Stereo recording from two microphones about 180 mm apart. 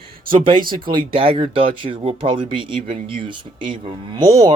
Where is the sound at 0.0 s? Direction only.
30° right (ahead or behind).